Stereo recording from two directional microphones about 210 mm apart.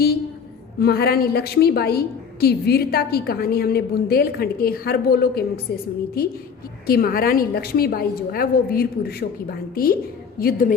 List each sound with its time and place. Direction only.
0.8 s a woman's voice: 50° left (ahead or behind)